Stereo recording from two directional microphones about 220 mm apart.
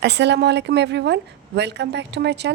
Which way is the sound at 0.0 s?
50° right (ahead or behind).